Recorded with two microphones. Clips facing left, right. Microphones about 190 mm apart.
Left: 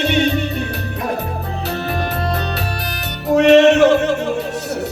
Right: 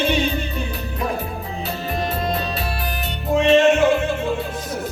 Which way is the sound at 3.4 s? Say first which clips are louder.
Left 5 dB; 70° left (ahead or behind).